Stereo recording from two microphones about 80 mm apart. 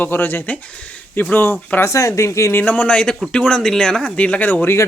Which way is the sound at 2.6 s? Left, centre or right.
Centre.